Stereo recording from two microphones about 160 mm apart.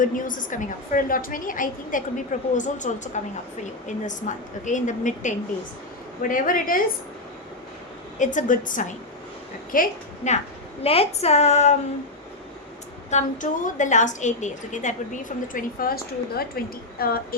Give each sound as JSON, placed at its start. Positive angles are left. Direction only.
{"t": 0.0, "sound": "a woman's voice", "side_deg": 55}
{"t": 8.2, "sound": "a woman's voice", "side_deg": 50}
{"t": 10.8, "sound": "a woman's voice", "side_deg": 40}
{"t": 13.1, "sound": "a woman's voice", "side_deg": 50}